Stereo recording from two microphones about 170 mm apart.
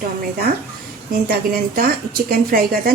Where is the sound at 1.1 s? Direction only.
55° right (ahead or behind).